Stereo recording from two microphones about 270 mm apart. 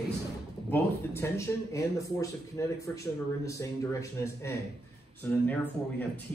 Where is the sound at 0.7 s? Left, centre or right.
Centre.